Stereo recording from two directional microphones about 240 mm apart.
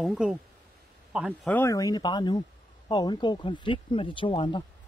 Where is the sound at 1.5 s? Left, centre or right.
Centre.